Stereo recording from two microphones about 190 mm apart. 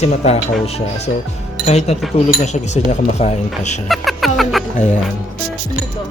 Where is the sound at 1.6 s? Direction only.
35° left (ahead or behind).